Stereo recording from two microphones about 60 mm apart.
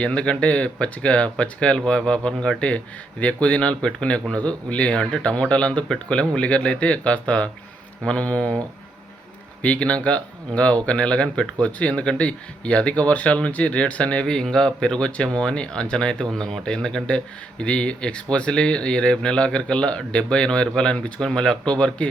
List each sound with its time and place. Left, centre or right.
0.0 s speech: centre